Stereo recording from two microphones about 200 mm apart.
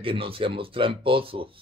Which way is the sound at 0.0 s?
25° right (ahead or behind).